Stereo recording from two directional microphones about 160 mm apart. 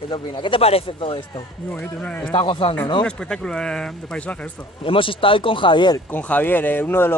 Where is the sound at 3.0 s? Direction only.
5° left (ahead or behind).